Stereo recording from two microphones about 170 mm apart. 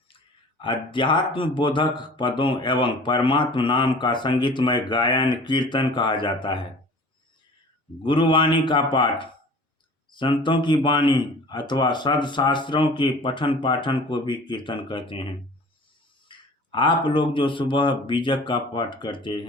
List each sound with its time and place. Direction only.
0.6 s speech: 30° left (ahead or behind)
8.0 s speech: 30° left (ahead or behind)
16.3 s speech: 30° left (ahead or behind)